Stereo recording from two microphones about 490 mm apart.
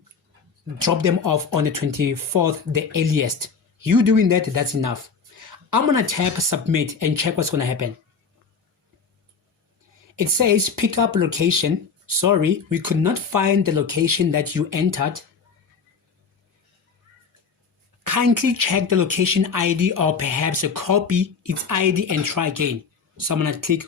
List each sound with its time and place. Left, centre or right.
0.8 s speech: right
9.9 s speech: right
18.0 s speech: right